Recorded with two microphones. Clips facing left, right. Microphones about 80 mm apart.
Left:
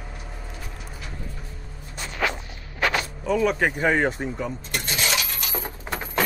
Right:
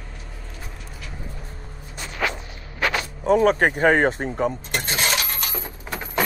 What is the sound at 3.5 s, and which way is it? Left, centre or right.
Coin, right.